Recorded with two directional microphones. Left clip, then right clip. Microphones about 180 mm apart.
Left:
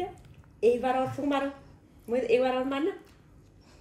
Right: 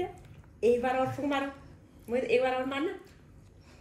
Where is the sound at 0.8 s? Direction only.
60° left (ahead or behind).